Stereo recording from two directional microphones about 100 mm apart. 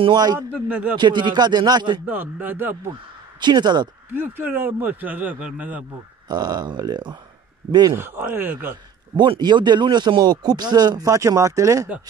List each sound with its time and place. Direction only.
0.0 s speech: 45° right (ahead or behind)
0.5 s a man's voice: 15° right (ahead or behind)
0.9 s speech: 50° right (ahead or behind)
2.0 s speech: 15° right (ahead or behind)
3.3 s speech: 45° right (ahead or behind)
4.1 s speech: 20° right (ahead or behind)
6.2 s speech: 45° right (ahead or behind)
7.9 s speech: 25° right (ahead or behind)
9.1 s speech: 50° right (ahead or behind); by 11.9 s 30° right (ahead or behind)